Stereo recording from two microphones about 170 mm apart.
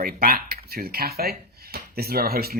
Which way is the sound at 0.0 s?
60° right (ahead or behind).